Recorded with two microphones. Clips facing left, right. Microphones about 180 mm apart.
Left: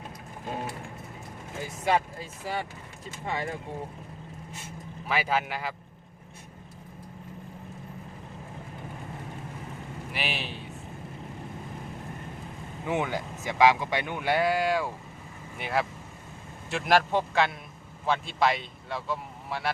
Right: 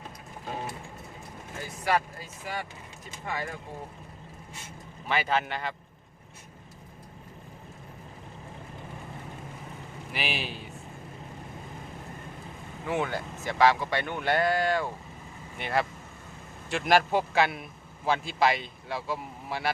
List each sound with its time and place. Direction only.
1.6 s speech: 20° left (ahead or behind)
5.0 s speech: 5° left (ahead or behind)
10.1 s a man's voice: centre (ahead or behind)
12.9 s speech: 15° left (ahead or behind); by 19.7 s centre (ahead or behind)